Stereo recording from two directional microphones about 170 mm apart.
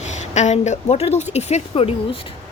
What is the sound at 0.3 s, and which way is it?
Speech, 45° left (ahead or behind).